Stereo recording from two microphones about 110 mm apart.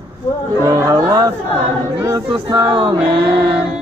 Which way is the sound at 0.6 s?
30° right (ahead or behind).